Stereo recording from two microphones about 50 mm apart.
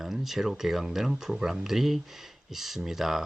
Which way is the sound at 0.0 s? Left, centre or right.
Centre.